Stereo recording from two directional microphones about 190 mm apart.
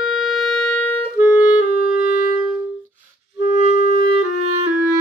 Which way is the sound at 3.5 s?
45° left (ahead or behind).